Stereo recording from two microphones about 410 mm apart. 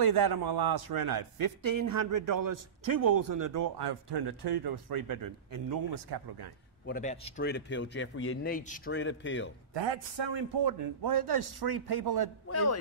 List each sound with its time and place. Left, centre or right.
0.0 s a man's voice: right
3.7 s a man's voice: right
6.9 s a man's voice: centre
9.8 s a man's voice: right